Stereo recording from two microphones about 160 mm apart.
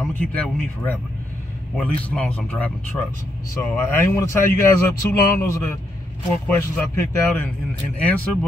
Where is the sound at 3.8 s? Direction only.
15° left (ahead or behind).